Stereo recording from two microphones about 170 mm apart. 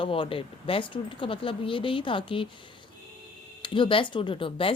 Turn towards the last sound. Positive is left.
turn(degrees=30)  # may be behind; listen again after turning